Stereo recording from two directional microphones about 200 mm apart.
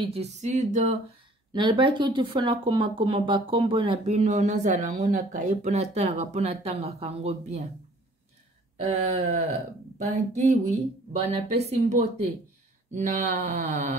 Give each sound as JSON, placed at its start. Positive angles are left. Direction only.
{"t": 0.0, "sound": "speech", "side_deg": -30}
{"t": 1.5, "sound": "speech", "side_deg": -25}
{"t": 8.8, "sound": "speech", "side_deg": -35}